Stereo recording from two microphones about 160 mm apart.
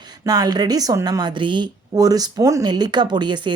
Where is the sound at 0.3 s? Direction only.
25° right (ahead or behind).